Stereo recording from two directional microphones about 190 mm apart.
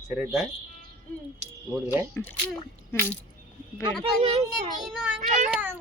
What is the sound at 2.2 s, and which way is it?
Speech, 10° left (ahead or behind).